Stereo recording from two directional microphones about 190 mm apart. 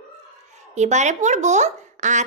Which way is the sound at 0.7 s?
40° right (ahead or behind).